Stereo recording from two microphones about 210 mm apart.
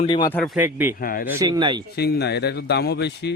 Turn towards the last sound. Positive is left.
turn(degrees=55)  # may be behind; listen again after turning